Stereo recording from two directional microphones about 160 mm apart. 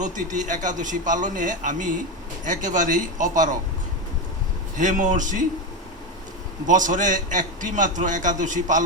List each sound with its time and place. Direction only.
0.0 s a man's voice: 55° right (ahead or behind)
4.8 s a man's voice: 50° right (ahead or behind)
6.7 s a man's voice: 55° right (ahead or behind)